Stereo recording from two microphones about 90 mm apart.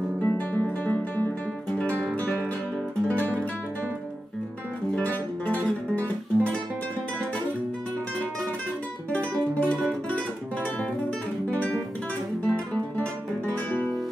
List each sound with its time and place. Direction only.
0.2 s music: 20° left (ahead or behind)
2.0 s music: 10° left (ahead or behind)
4.9 s music: 15° left (ahead or behind)
9.1 s music: 15° left (ahead or behind)
11.5 s guitar: 15° left (ahead or behind)